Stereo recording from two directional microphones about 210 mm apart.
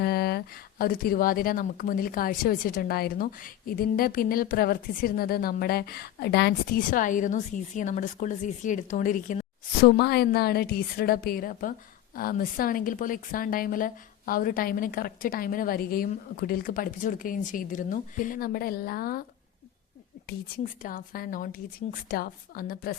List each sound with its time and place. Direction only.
0.0 s speech: 50° left (ahead or behind)
10.0 s speech: 50° left (ahead or behind)
20.8 s speech: 40° left (ahead or behind)